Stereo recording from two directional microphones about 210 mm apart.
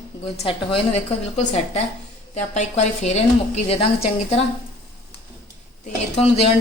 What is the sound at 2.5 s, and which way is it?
A woman's voice, 30° left (ahead or behind).